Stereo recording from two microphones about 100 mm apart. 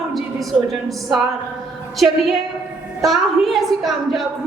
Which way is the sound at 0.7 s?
Centre (ahead or behind).